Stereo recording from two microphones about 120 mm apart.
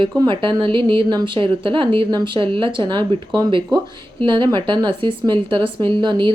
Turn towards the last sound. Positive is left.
turn(degrees=-40)  # may be behind; listen again after turning